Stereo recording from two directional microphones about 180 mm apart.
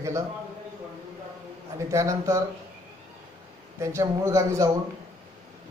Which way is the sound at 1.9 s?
15° right (ahead or behind).